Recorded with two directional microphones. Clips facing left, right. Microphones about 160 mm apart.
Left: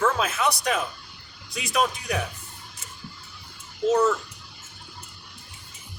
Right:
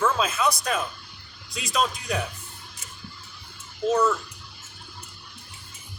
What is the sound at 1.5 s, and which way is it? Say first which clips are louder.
Speech: left 1 dB; 65° left (ahead or behind).